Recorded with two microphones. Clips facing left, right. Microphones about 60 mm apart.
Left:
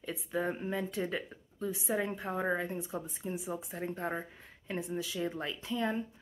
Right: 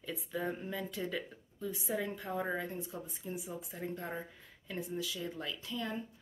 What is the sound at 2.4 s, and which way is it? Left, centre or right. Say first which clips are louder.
Speech: left 4 dB; left.